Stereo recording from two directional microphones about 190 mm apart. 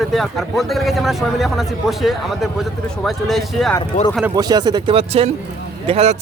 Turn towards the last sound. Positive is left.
turn(degrees=-35)  # may be behind; listen again after turning